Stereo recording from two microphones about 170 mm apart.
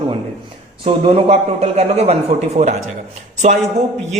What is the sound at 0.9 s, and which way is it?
Speech, 35° right (ahead or behind).